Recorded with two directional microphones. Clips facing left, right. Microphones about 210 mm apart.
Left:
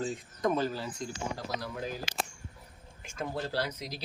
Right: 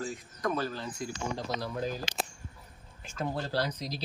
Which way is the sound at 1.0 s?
10° right (ahead or behind).